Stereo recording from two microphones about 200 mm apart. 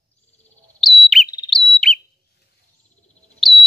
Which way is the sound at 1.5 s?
Centre (ahead or behind).